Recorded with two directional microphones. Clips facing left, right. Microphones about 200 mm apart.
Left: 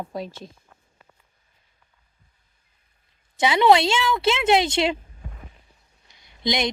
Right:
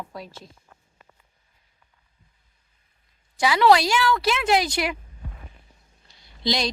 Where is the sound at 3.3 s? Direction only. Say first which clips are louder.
Left 1 dB; 20° left (ahead or behind).